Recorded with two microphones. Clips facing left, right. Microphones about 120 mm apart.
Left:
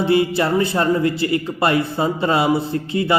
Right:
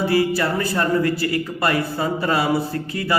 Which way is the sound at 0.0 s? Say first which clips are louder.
Left 2 dB; 25° left (ahead or behind).